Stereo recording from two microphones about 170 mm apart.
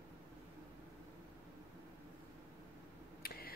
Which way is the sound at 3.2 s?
60° left (ahead or behind).